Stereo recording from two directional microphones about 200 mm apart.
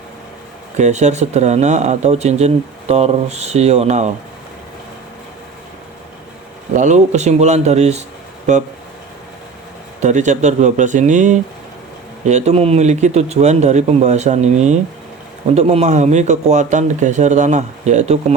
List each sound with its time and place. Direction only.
0.8 s speech: 35° right (ahead or behind)
6.7 s speech: 35° right (ahead or behind)
10.0 s speech: 35° right (ahead or behind)